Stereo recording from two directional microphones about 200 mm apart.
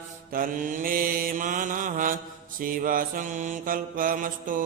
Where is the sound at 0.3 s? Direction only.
45° right (ahead or behind).